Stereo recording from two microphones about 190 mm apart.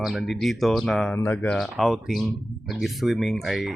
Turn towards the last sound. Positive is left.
turn(degrees=0)  # may be behind; listen again after turning